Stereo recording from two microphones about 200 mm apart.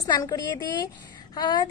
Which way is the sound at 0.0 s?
20° left (ahead or behind).